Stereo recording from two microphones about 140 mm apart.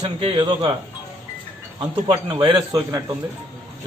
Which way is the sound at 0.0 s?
45° right (ahead or behind).